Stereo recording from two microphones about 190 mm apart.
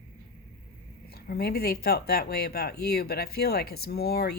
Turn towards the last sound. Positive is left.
turn(degrees=55)  # may be behind; listen again after turning